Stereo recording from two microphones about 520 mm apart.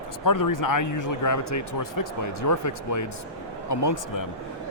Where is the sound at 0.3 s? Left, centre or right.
Left.